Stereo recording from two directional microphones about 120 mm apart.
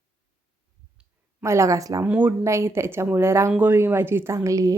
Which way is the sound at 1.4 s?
25° right (ahead or behind).